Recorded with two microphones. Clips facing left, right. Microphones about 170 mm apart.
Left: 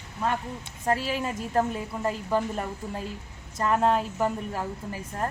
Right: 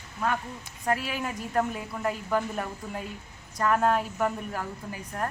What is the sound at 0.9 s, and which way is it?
A woman's voice, 30° left (ahead or behind).